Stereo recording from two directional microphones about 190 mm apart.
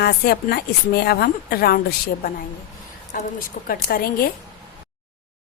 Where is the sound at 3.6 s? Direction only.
50° left (ahead or behind).